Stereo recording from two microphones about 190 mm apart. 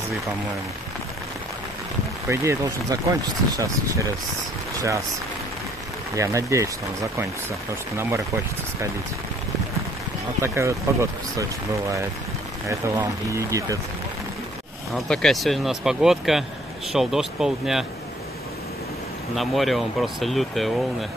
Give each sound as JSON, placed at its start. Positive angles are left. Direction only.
{"t": 2.2, "sound": "speech", "side_deg": -15}
{"t": 6.1, "sound": "speech", "side_deg": -15}
{"t": 10.4, "sound": "speech", "side_deg": -15}
{"t": 12.6, "sound": "speech", "side_deg": -15}
{"t": 15.0, "sound": "speech", "side_deg": 0}
{"t": 19.3, "sound": "speech", "side_deg": 0}